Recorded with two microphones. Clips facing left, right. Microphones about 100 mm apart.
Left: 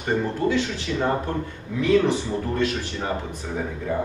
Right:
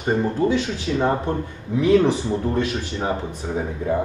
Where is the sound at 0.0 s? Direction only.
15° right (ahead or behind).